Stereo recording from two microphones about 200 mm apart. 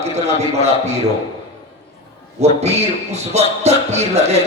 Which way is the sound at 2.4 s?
30° right (ahead or behind).